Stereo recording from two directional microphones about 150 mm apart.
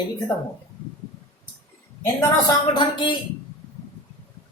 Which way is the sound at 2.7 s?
30° left (ahead or behind).